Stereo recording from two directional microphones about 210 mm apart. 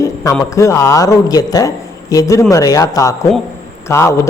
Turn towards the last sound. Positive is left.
turn(degrees=15)  # may be behind; listen again after turning